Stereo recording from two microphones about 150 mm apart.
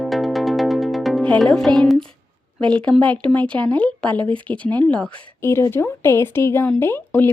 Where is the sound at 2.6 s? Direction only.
10° left (ahead or behind).